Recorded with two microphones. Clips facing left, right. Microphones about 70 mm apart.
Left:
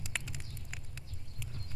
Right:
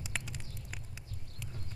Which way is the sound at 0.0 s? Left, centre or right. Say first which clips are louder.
Even; centre.